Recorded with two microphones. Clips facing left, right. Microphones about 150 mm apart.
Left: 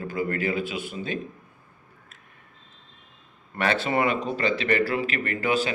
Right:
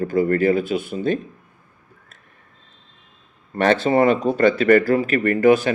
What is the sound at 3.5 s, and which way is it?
Speech, 40° right (ahead or behind).